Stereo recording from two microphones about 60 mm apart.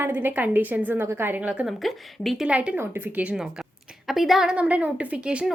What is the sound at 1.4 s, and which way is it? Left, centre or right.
Speech, right.